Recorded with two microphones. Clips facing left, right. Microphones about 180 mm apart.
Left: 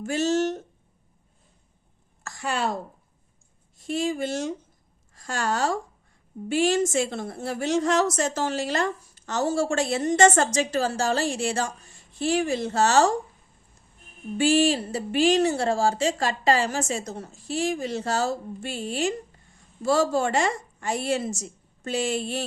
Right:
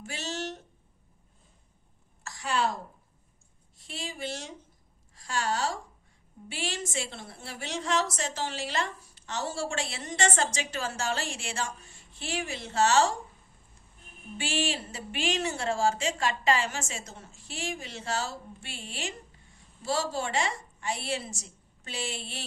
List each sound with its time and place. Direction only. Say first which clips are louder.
0.0 s a woman's voice: left 13 dB; 45° left (ahead or behind)
2.2 s a sound: left 2 dB; 50° left (ahead or behind)
3.8 s a woman's voice: left 11 dB; 45° left (ahead or behind)
14.3 s a woman's voice: left 11 dB; 40° left (ahead or behind)